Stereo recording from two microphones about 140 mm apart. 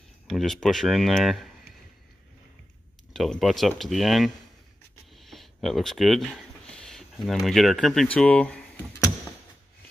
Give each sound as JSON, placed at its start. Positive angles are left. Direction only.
{"t": 0.3, "sound": "speech", "side_deg": 5}
{"t": 3.1, "sound": "speech", "side_deg": 0}